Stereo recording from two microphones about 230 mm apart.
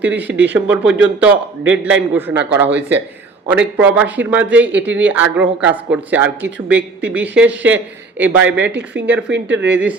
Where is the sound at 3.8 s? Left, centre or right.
Centre.